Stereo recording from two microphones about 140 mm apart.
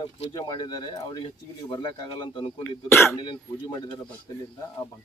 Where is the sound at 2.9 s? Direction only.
20° left (ahead or behind).